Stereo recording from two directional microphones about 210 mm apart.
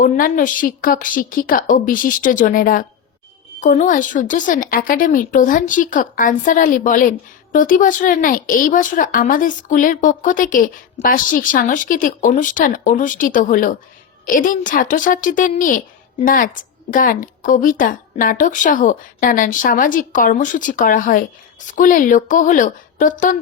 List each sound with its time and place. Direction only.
0.0 s a woman's voice: 40° left (ahead or behind)